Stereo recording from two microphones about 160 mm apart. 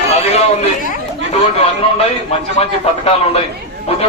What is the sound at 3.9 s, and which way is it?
Speech, 40° left (ahead or behind).